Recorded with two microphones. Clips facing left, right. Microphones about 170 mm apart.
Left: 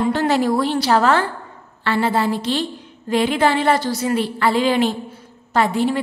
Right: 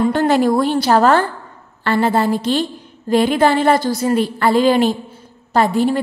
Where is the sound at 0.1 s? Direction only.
50° right (ahead or behind).